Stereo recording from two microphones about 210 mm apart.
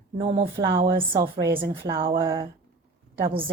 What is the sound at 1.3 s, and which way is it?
Speech, 50° right (ahead or behind).